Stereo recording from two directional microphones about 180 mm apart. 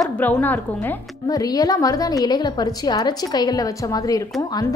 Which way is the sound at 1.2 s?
20° left (ahead or behind).